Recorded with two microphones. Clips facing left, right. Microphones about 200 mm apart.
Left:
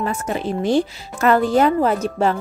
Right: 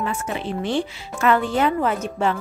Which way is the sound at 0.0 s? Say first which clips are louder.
Left 3 dB; 40° left (ahead or behind).